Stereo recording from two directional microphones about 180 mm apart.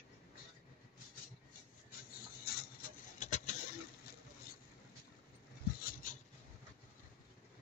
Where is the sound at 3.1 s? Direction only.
40° left (ahead or behind).